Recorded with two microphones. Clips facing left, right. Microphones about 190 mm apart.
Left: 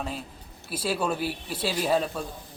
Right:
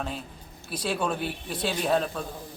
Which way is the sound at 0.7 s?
5° left (ahead or behind).